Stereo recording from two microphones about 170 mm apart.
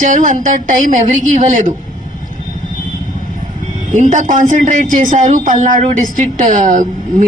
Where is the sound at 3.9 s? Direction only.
45° right (ahead or behind).